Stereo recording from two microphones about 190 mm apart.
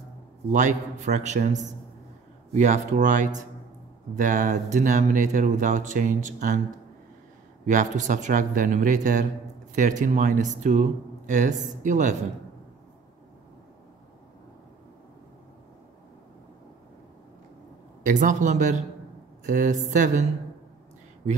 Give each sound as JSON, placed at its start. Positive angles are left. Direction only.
{"t": 0.5, "sound": "speech", "side_deg": -40}
{"t": 7.6, "sound": "speech", "side_deg": -40}
{"t": 18.0, "sound": "speech", "side_deg": -40}